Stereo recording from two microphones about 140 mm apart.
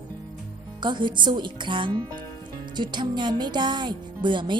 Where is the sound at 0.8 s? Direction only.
35° right (ahead or behind).